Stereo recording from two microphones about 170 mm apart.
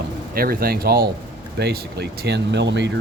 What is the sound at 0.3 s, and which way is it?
Speech, 60° right (ahead or behind).